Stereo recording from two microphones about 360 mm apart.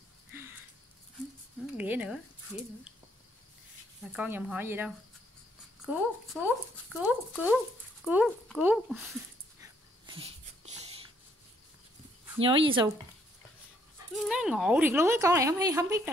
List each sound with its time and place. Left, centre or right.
0.3 s a sound: centre
1.8 s speech: centre
4.1 s speech: centre
9.6 s dog: centre
12.4 s a woman's voice: centre
14.2 s a woman's voice: centre